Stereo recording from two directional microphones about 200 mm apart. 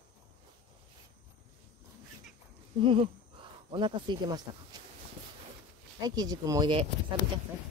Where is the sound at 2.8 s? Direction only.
25° right (ahead or behind).